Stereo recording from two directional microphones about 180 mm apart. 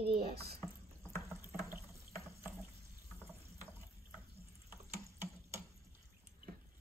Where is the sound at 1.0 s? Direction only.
15° right (ahead or behind).